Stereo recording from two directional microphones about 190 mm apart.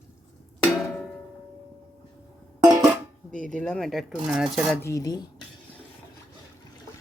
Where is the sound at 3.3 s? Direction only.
5° left (ahead or behind).